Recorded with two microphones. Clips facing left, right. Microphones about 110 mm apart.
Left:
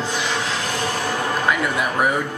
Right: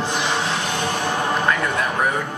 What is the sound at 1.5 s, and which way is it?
Speech, 10° left (ahead or behind).